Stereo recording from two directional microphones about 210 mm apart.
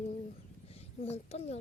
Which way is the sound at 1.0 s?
30° left (ahead or behind).